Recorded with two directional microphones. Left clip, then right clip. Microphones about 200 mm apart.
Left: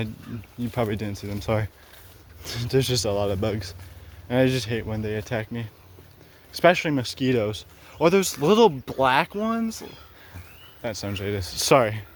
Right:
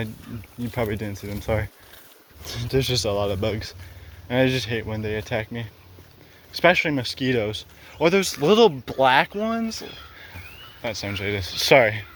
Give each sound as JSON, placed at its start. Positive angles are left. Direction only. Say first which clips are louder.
{"t": 0.7, "sound": "speech", "louder": "even", "side_deg": 35}